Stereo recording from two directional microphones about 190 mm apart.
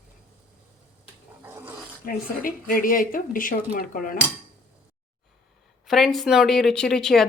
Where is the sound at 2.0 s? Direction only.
50° left (ahead or behind).